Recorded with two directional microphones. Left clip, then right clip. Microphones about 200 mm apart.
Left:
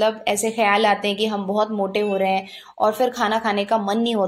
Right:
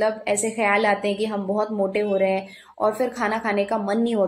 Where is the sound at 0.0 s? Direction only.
20° left (ahead or behind).